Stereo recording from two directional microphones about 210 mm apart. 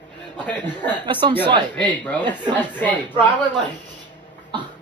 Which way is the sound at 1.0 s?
25° right (ahead or behind).